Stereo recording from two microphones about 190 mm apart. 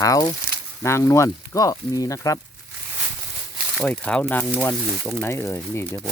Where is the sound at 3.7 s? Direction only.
5° left (ahead or behind).